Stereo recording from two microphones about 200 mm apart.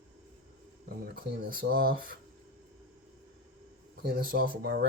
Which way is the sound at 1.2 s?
45° right (ahead or behind).